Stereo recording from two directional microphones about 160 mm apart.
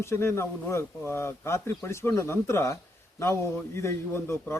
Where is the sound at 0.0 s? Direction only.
15° left (ahead or behind).